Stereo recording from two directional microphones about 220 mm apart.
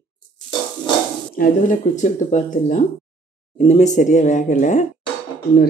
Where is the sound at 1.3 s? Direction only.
40° left (ahead or behind).